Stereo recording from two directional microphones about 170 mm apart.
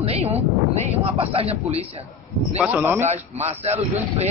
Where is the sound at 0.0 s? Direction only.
40° right (ahead or behind).